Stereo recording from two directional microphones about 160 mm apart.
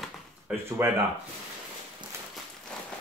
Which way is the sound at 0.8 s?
15° right (ahead or behind).